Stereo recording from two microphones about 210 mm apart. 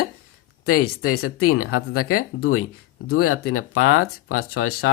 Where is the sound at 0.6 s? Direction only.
90° left.